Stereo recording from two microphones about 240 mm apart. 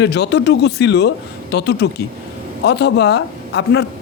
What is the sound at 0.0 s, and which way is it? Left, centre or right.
Speech, left.